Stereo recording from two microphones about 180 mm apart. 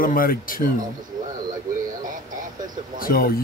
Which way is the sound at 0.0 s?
50° left (ahead or behind).